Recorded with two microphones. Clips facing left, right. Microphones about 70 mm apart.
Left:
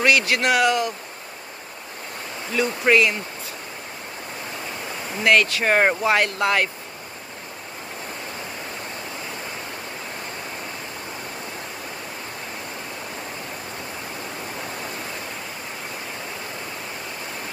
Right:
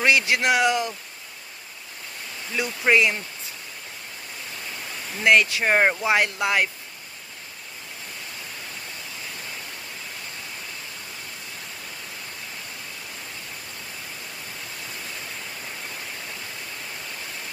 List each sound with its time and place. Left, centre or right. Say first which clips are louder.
0.0 s speech: left 1 dB; right
2.6 s speech: left 2 dB; centre
5.2 s speech: even; centre